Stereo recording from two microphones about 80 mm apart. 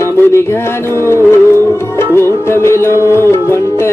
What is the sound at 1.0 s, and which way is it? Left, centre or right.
Music, left.